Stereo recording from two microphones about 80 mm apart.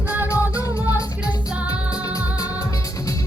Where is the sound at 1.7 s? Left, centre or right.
Left.